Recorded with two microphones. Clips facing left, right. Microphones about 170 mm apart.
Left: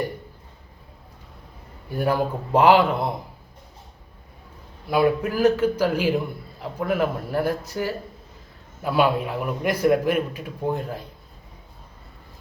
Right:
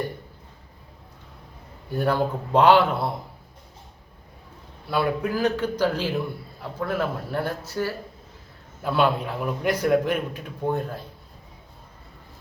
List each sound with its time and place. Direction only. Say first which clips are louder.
1.9 s a man's voice: even; 10° left (ahead or behind)
4.9 s a man's voice: left 4 dB; 10° left (ahead or behind)